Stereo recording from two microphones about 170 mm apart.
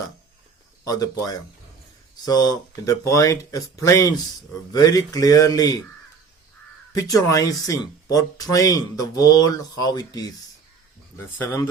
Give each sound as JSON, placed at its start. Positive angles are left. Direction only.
{"t": 0.9, "sound": "speech", "side_deg": 20}
{"t": 6.9, "sound": "speech", "side_deg": 20}